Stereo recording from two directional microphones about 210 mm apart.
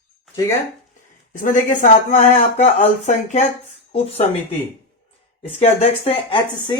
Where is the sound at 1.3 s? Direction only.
40° left (ahead or behind).